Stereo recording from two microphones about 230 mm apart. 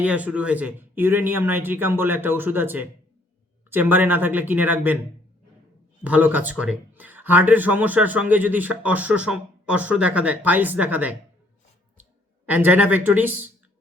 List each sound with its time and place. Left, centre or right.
0.0 s speech: centre
6.0 s speech: centre
12.5 s speech: centre